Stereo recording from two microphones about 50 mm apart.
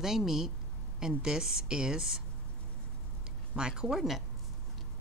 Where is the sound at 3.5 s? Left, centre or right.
Centre.